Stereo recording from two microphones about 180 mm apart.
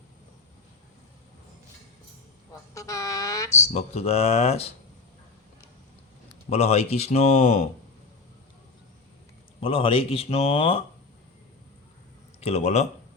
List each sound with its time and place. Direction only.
2.7 s a sound: 20° left (ahead or behind)
3.7 s speech: 35° left (ahead or behind)
6.5 s speech: 35° left (ahead or behind)
9.6 s speech: 30° left (ahead or behind)
12.4 s speech: 35° left (ahead or behind)